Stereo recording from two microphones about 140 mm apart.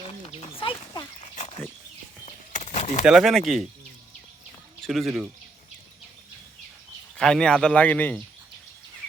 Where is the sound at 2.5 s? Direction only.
50° left (ahead or behind).